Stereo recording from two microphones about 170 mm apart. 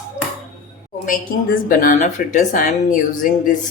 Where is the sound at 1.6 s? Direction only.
50° left (ahead or behind).